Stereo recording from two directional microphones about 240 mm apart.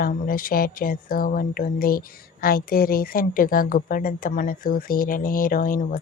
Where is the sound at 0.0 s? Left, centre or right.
Left.